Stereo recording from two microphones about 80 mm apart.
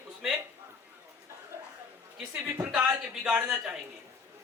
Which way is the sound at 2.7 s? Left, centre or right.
Centre.